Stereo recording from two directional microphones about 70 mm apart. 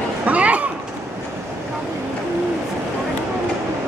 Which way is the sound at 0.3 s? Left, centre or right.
Right.